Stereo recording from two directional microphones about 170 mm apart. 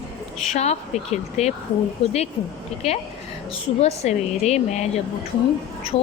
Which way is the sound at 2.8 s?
35° left (ahead or behind).